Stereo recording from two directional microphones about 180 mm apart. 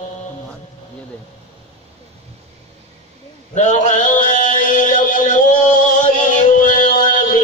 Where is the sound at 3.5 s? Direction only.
40° left (ahead or behind).